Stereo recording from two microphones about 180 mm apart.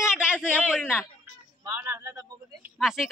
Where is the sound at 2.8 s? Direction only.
Centre (ahead or behind).